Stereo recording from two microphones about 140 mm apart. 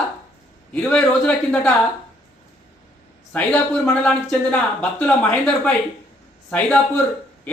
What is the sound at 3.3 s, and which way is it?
Speech, 10° left (ahead or behind).